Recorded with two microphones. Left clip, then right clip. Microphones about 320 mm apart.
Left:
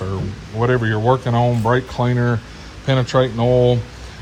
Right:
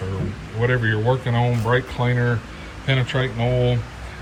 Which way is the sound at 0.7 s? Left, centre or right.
Centre.